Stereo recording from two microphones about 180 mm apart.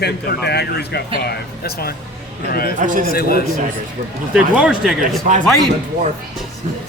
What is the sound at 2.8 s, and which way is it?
Speech, 45° right (ahead or behind).